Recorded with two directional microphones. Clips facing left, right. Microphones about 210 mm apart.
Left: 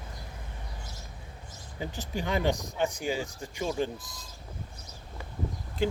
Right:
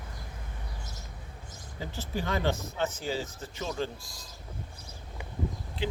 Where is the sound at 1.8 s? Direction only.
15° left (ahead or behind).